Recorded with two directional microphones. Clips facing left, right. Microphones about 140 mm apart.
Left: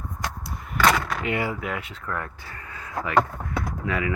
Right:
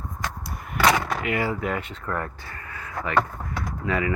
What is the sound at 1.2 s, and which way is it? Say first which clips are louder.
Speech: right 1 dB; 25° left (ahead or behind).